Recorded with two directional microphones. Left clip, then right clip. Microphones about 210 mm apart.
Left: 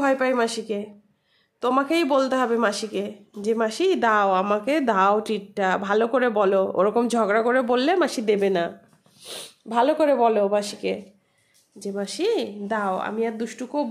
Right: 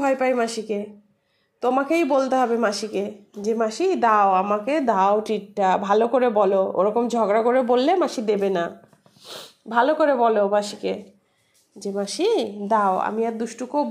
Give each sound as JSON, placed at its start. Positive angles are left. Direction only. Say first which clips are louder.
{"t": 0.0, "sound": "a woman's voice", "louder": "even", "side_deg": 10}
{"t": 4.8, "sound": "speech", "louder": "right 1 dB", "side_deg": 15}
{"t": 9.9, "sound": "speech", "louder": "right 1 dB", "side_deg": 15}
{"t": 11.8, "sound": "a woman's voice", "louder": "right 2 dB", "side_deg": 0}